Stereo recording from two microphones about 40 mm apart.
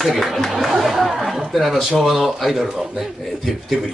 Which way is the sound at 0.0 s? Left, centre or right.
Centre.